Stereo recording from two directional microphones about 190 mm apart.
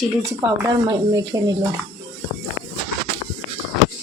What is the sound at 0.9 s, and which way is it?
Speech, 20° right (ahead or behind).